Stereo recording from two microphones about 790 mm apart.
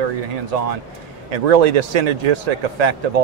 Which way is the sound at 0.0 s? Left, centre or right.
Right.